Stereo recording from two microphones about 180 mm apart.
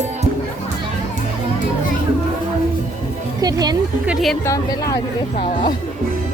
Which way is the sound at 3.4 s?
20° right (ahead or behind).